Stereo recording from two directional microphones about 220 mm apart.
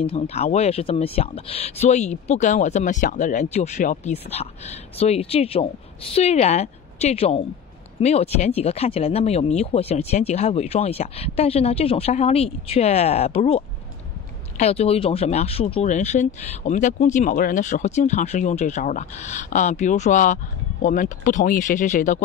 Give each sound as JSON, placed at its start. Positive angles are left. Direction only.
{"t": 0.0, "sound": "speech", "side_deg": 25}